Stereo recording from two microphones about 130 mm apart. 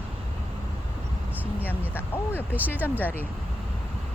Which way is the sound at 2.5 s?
15° right (ahead or behind).